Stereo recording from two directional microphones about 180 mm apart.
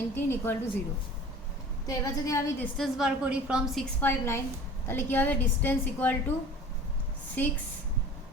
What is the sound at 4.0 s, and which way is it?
A woman's voice, 15° left (ahead or behind).